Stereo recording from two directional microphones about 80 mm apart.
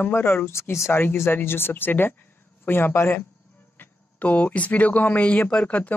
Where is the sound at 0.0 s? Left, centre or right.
Left.